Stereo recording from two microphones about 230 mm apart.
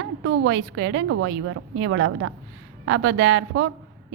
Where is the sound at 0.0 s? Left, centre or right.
Right.